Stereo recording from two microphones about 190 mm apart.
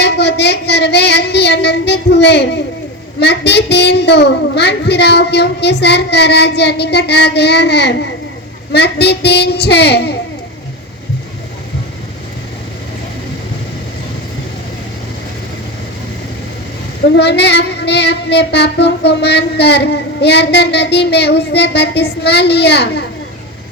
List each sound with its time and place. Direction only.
0.0 s child singing: 65° left (ahead or behind)
17.1 s child singing: 65° left (ahead or behind)